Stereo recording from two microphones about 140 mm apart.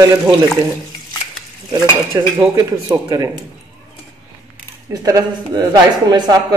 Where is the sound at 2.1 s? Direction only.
25° right (ahead or behind).